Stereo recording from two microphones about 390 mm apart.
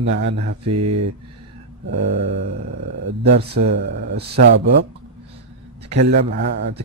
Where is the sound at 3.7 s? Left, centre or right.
Right.